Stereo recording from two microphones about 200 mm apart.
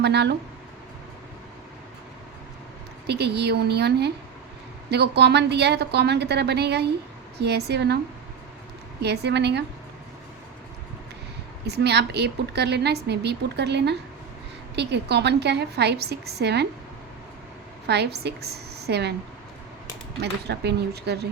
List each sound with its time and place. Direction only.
0.0 s a woman's voice: 55° right (ahead or behind)
3.1 s a woman's voice: 55° right (ahead or behind)
9.0 s a woman's voice: 55° right (ahead or behind)
11.6 s a woman's voice: 55° right (ahead or behind)
17.8 s a woman's voice: 55° right (ahead or behind)
20.5 s a woman's voice: 55° right (ahead or behind)